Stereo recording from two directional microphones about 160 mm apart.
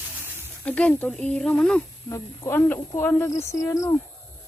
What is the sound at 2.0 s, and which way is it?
Speech, 15° left (ahead or behind).